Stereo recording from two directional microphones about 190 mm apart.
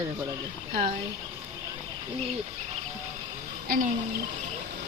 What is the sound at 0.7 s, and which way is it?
Speech, 35° right (ahead or behind).